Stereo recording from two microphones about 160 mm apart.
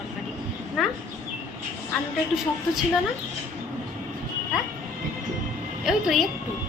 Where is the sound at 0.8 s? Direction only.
Centre (ahead or behind).